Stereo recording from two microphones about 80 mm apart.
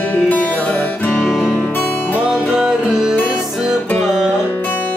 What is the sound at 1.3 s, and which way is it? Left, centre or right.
Music, centre.